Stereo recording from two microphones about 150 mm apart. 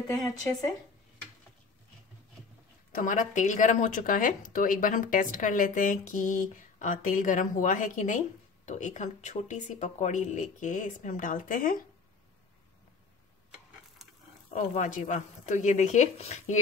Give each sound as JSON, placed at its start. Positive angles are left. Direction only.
{"t": 2.9, "sound": "speech", "side_deg": 60}
{"t": 14.0, "sound": "a sound", "side_deg": 0}
{"t": 14.5, "sound": "a woman's voice", "side_deg": 55}